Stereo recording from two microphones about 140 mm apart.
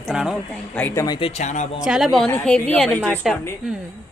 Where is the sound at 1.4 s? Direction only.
60° left (ahead or behind).